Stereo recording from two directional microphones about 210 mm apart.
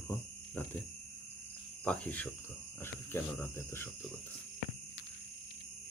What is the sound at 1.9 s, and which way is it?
Speech, 5° left (ahead or behind).